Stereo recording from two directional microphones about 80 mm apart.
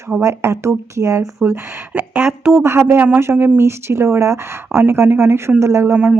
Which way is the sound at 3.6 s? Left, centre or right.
Right.